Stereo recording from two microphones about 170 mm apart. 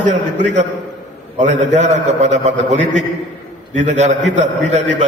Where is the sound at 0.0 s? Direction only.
45° right (ahead or behind).